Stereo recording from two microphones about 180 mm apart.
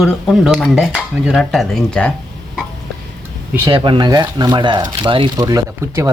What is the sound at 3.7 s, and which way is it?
Speech, 25° right (ahead or behind).